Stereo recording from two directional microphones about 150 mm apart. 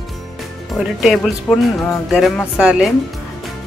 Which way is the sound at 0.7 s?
Centre (ahead or behind).